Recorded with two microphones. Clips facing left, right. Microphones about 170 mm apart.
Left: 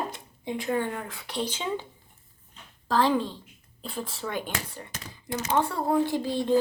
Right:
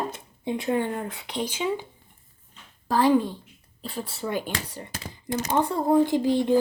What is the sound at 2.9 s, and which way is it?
Speech, 15° right (ahead or behind).